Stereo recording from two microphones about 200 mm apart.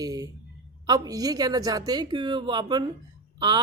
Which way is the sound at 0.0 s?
15° right (ahead or behind).